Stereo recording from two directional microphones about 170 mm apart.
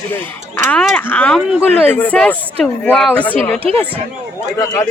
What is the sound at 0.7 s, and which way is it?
Speech, 5° left (ahead or behind).